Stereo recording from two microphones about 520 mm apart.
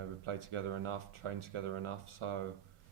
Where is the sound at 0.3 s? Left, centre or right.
Right.